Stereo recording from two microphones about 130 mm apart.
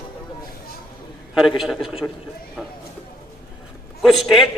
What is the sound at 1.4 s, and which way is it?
Speech, centre (ahead or behind).